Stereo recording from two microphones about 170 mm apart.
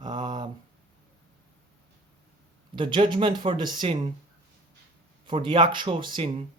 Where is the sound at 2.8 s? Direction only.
25° right (ahead or behind).